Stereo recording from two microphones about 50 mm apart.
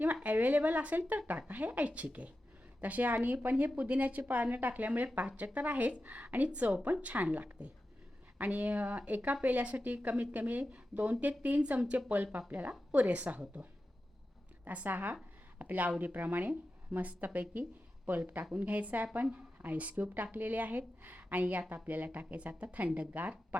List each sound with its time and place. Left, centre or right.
0.0 s a woman's voice: right
17.5 s a sound: right
18.5 s speech: right
21.4 s speech: right
21.8 s speech: right